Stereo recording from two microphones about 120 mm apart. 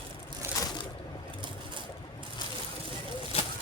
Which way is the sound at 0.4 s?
25° right (ahead or behind).